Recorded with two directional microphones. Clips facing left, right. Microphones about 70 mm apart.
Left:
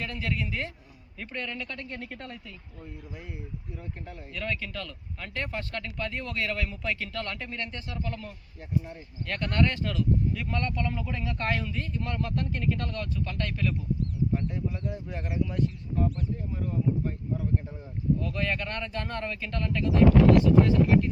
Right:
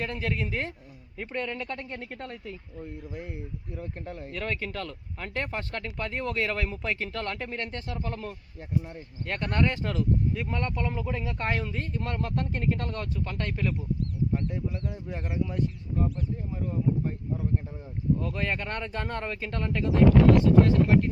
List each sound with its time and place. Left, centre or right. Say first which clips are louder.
0.0 s speech: right 2 dB; right
1.2 s speech: right 3 dB; right
3.8 s speech: right 4 dB; right
8.9 s speech: right 1 dB; right
9.9 s speech: even; right
10.4 s speech: even; centre
11.6 s speech: right 1 dB; right
18.2 s speech: even; right